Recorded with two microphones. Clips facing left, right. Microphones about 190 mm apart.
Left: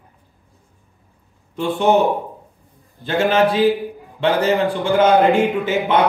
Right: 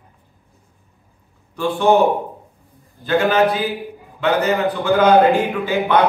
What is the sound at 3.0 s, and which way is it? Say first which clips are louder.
Speech: right 1 dB; 25° left (ahead or behind).